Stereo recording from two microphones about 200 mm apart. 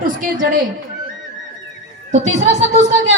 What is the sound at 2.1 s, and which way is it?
A woman's voice, 35° right (ahead or behind).